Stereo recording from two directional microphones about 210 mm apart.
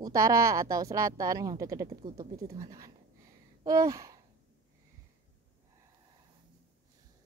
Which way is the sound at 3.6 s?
15° right (ahead or behind).